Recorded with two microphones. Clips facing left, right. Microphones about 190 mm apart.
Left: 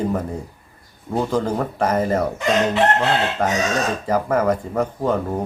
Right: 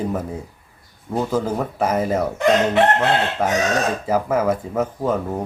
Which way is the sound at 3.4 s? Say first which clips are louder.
Right 1 dB; 5° right (ahead or behind).